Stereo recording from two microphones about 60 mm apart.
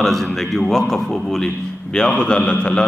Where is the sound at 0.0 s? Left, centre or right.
Centre.